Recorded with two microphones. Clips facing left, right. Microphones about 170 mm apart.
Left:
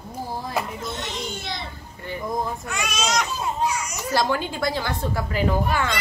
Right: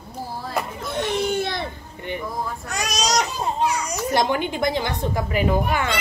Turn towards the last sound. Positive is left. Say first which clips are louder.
# right 2 dB
turn(degrees=-15)  # may be behind; listen again after turning